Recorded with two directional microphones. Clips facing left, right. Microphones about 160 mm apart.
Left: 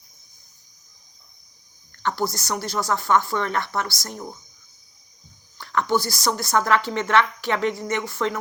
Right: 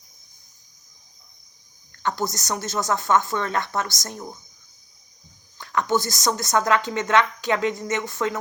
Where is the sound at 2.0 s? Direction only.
15° right (ahead or behind).